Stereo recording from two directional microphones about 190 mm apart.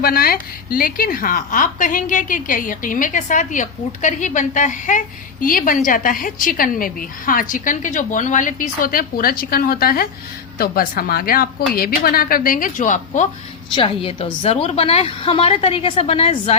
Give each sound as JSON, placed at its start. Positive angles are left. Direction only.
{"t": 0.0, "sound": "a woman's voice", "side_deg": 50}
{"t": 13.7, "sound": "a woman's voice", "side_deg": 30}